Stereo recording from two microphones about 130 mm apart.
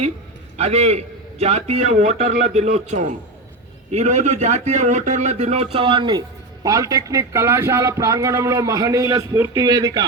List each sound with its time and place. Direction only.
0.5 s a man's voice: 55° right (ahead or behind)
5.7 s a man's voice: 40° right (ahead or behind)